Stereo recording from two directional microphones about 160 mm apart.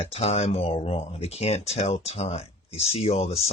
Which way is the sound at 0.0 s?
40° left (ahead or behind).